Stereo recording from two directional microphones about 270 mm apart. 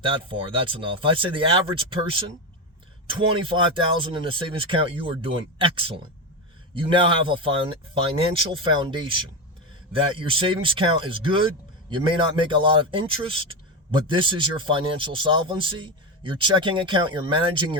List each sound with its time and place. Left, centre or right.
0.0 s a man's voice: centre